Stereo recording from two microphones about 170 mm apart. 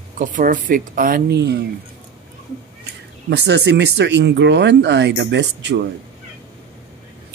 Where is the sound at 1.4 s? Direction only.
85° right.